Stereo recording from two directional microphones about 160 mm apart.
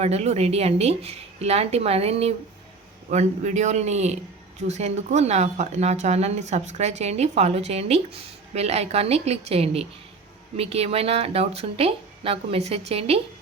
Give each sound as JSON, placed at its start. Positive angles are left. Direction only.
{"t": 0.0, "sound": "speech", "side_deg": -40}